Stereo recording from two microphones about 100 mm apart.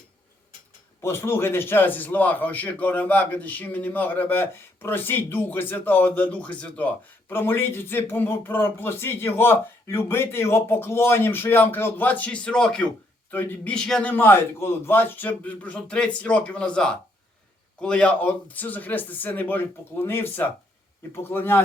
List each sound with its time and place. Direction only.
1.0 s a man's voice: 25° left (ahead or behind); by 12.9 s 10° left (ahead or behind)
13.3 s a man's voice: 20° left (ahead or behind)
13.7 s a man's voice: 5° left (ahead or behind)
14.1 s a man's voice: 20° left (ahead or behind)